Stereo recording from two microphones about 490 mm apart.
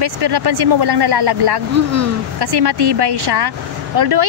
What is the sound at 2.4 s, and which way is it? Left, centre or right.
Speech, right.